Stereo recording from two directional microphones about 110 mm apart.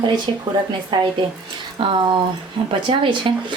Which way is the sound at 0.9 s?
45° right (ahead or behind).